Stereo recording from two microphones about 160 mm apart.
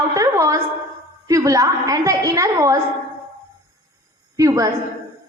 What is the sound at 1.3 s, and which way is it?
A woman's voice, 20° right (ahead or behind).